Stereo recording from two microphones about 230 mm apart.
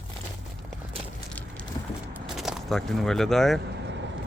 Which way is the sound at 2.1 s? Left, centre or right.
Centre.